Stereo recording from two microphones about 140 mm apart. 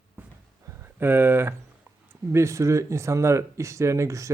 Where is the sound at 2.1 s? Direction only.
20° right (ahead or behind).